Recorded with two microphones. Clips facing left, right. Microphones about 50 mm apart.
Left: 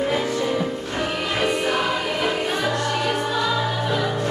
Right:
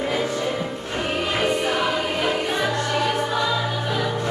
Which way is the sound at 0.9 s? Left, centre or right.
Right.